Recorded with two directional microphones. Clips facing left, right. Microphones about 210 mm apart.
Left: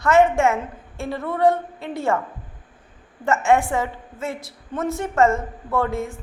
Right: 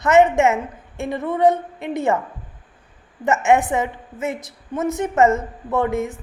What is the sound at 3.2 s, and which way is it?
A woman's voice, 20° right (ahead or behind).